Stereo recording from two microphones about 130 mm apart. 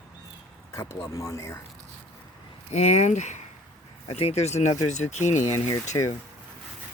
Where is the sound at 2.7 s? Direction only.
60° left (ahead or behind).